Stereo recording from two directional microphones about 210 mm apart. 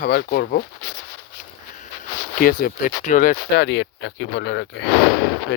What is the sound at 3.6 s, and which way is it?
Speech, 60° left (ahead or behind).